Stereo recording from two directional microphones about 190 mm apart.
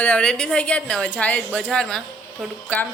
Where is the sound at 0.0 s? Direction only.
5° left (ahead or behind).